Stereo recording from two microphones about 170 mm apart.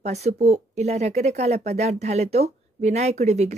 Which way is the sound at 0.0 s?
40° right (ahead or behind).